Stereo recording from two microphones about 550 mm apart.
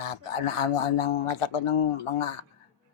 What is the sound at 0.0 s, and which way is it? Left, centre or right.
Speech, left.